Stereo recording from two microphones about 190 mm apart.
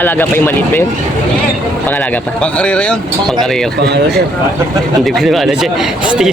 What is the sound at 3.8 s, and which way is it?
Speech, 60° right (ahead or behind).